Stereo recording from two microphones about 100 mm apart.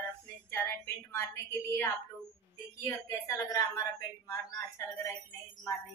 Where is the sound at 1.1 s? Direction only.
30° left (ahead or behind).